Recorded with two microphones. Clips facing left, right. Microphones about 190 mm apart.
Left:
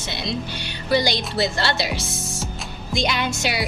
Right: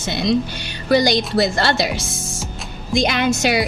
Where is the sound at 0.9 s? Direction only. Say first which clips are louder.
Right 5 dB; 45° right (ahead or behind).